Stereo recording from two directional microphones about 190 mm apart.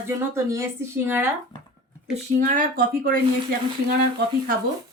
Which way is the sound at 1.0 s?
10° right (ahead or behind).